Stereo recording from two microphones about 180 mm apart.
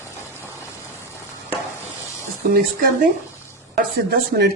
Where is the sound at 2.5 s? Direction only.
50° right (ahead or behind).